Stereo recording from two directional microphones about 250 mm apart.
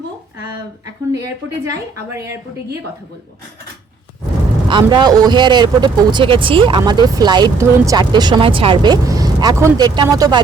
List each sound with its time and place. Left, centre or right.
1.1 s speech: centre
4.7 s speech: centre